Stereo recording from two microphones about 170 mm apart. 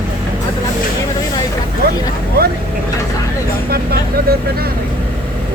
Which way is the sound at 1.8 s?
65° right (ahead or behind).